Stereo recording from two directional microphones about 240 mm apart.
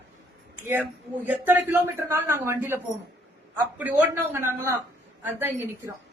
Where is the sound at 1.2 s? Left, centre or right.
Centre.